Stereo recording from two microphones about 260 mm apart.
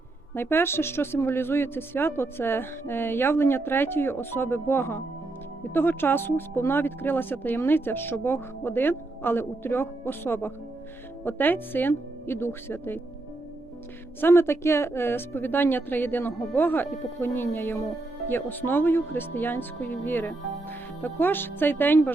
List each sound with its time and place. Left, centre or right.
0.3 s speech: centre
14.2 s speech: centre